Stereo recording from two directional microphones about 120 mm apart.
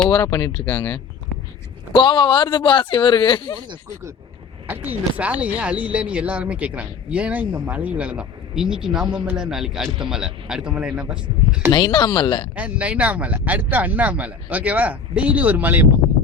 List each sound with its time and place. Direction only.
0.1 s speech: 30° left (ahead or behind)
2.0 s speech: 40° left (ahead or behind)
4.6 s speech: 15° right (ahead or behind)
11.7 s speech: 40° left (ahead or behind)
12.5 s speech: 10° right (ahead or behind)